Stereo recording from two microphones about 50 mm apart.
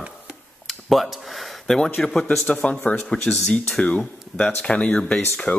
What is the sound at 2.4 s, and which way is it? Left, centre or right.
Speech, left.